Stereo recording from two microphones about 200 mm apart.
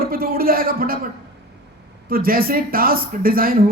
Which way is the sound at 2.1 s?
45° right (ahead or behind).